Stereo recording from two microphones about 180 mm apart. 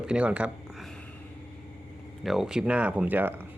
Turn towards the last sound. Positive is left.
turn(degrees=-10)  # may be behind; listen again after turning